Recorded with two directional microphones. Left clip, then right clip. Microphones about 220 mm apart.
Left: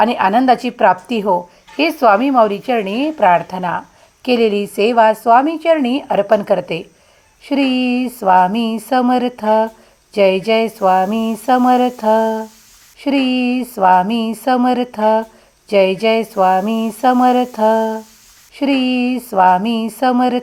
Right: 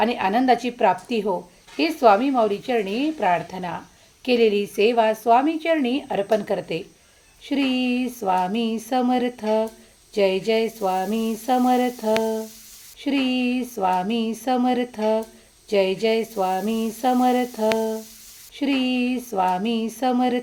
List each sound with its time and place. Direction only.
0.0 s a woman's voice: 20° left (ahead or behind)
7.6 s a woman's voice: 55° left (ahead or behind)
8.2 s a woman's voice: 15° left (ahead or behind)
13.1 s a woman's voice: 55° left (ahead or behind)
13.6 s a woman's voice: 20° left (ahead or behind)
18.7 s a woman's voice: 55° left (ahead or behind)
19.1 s a woman's voice: 15° left (ahead or behind)